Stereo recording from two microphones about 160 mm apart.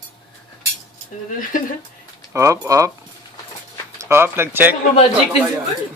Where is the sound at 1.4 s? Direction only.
60° left (ahead or behind).